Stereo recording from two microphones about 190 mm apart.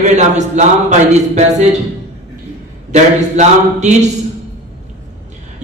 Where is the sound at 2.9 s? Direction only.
40° right (ahead or behind).